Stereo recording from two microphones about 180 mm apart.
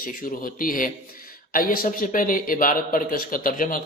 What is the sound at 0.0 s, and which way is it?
Speech, 50° left (ahead or behind).